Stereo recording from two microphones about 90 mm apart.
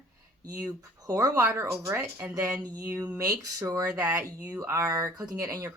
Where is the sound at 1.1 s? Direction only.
35° right (ahead or behind).